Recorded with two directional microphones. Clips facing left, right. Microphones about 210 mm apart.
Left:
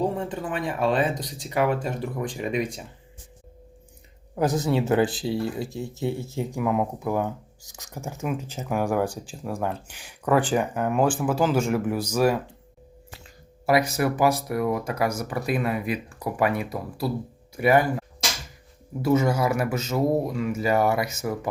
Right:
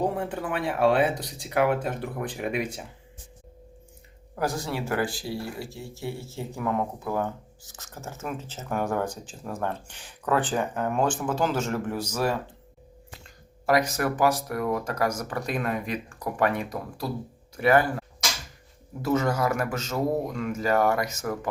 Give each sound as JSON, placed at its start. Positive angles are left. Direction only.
{"t": 0.6, "sound": "speech", "side_deg": -65}
{"t": 0.9, "sound": "speech", "side_deg": -10}
{"t": 1.7, "sound": "speech", "side_deg": -60}
{"t": 2.5, "sound": "speech", "side_deg": -5}
{"t": 4.4, "sound": "speech", "side_deg": 20}
{"t": 19.0, "sound": "speech", "side_deg": 10}